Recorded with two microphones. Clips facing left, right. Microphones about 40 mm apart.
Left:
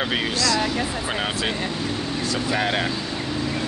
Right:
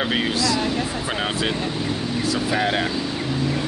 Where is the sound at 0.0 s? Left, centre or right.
Centre.